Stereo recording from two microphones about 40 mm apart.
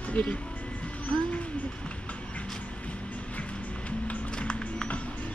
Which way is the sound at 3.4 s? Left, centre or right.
Left.